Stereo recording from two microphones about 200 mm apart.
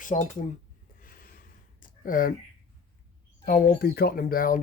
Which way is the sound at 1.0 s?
45° left (ahead or behind).